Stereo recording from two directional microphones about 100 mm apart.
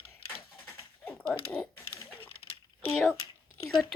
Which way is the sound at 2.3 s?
75° left (ahead or behind).